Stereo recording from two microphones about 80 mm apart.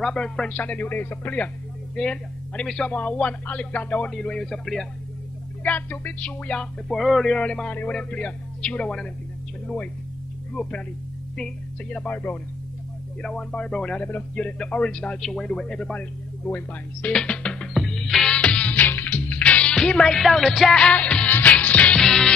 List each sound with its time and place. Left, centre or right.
0.0 s speech: centre
4.1 s speech: centre
5.6 s speech: left
10.5 s speech: centre
17.1 s music: centre